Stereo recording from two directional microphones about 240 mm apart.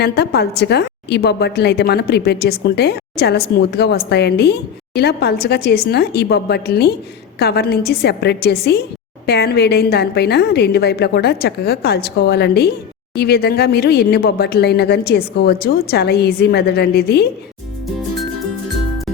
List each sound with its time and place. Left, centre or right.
0.0 s a woman's voice: left